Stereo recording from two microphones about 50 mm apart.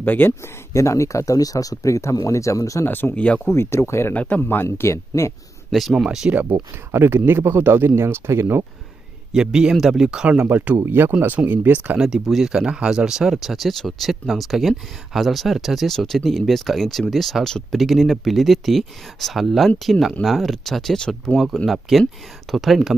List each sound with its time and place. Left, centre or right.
0.0 s speech: left
0.7 s speech: left
2.9 s speech: left
3.5 s speech: left
4.1 s speech: left
4.4 s speech: left
4.7 s speech: left
5.7 s speech: centre
6.0 s speech: centre
6.9 s speech: right
9.3 s speech: centre
10.4 s speech: right
10.9 s speech: right
12.3 s speech: centre